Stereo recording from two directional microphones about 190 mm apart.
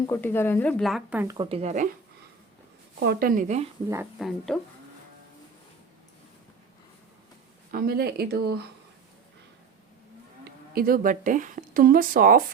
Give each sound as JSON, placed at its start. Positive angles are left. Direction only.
{"t": 0.1, "sound": "speech", "side_deg": 10}
{"t": 1.4, "sound": "speech", "side_deg": -30}
{"t": 3.0, "sound": "speech", "side_deg": -50}
{"t": 4.2, "sound": "speech", "side_deg": 0}
{"t": 7.7, "sound": "speech", "side_deg": -50}
{"t": 10.8, "sound": "speech", "side_deg": -50}